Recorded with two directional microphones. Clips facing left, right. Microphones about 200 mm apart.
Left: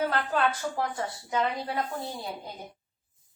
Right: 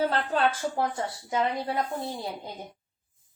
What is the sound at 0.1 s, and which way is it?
Speech, 30° right (ahead or behind).